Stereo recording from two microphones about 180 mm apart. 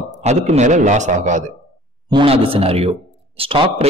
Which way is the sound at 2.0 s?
30° right (ahead or behind).